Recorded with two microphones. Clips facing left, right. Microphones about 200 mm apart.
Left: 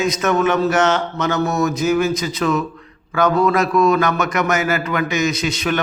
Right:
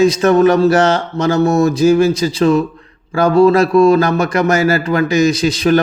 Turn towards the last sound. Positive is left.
turn(degrees=-35)  # may be behind; listen again after turning